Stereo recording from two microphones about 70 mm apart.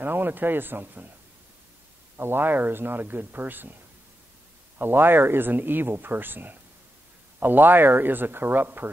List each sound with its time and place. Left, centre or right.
0.0 s speech: right
2.1 s speech: right
4.7 s speech: right